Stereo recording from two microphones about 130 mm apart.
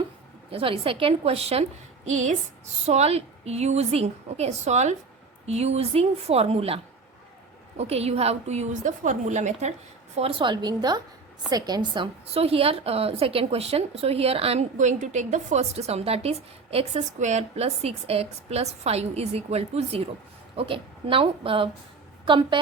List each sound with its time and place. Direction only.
0.5 s a woman's voice: 45° right (ahead or behind)
2.0 s a woman's voice: 65° right (ahead or behind)
7.8 s a woman's voice: 55° right (ahead or behind)
10.2 s a woman's voice: 45° right (ahead or behind)
12.3 s a woman's voice: 50° right (ahead or behind)